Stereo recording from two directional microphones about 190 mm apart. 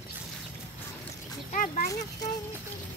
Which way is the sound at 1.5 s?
45° left (ahead or behind).